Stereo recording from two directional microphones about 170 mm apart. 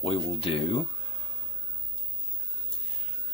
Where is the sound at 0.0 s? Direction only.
35° left (ahead or behind).